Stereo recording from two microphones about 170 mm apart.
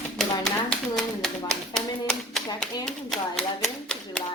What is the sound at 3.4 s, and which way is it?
Typewriter, 5° left (ahead or behind).